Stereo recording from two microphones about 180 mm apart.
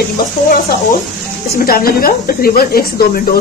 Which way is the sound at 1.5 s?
55° left (ahead or behind).